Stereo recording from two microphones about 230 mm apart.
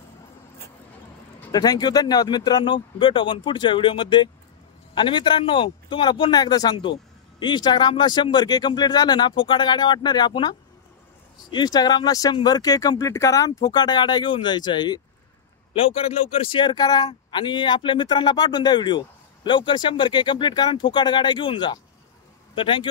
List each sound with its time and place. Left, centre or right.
1.5 s speech: centre
11.5 s a man's voice: centre